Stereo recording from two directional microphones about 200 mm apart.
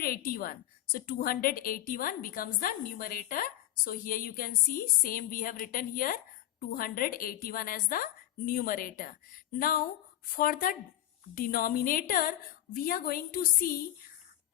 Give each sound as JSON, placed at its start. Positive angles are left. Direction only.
{"t": 0.0, "sound": "a woman's voice", "side_deg": 45}